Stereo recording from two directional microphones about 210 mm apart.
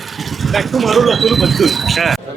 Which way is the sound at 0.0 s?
Centre (ahead or behind).